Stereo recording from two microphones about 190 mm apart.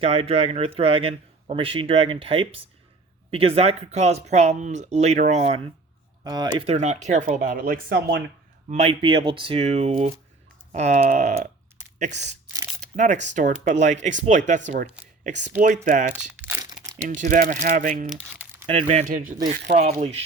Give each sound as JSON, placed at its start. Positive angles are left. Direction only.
{"t": 0.0, "sound": "speech", "side_deg": -30}
{"t": 6.2, "sound": "speech", "side_deg": -20}
{"t": 6.6, "sound": "speech", "side_deg": -35}
{"t": 8.6, "sound": "speech", "side_deg": -35}
{"t": 16.4, "sound": "crumpling", "side_deg": -15}
{"t": 17.1, "sound": "speech", "side_deg": -45}
{"t": 18.6, "sound": "speech", "side_deg": -35}
{"t": 19.5, "sound": "speech", "side_deg": -65}
{"t": 20.0, "sound": "speech", "side_deg": -35}